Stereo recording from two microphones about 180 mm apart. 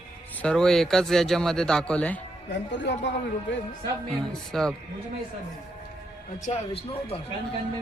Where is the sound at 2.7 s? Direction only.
80° left.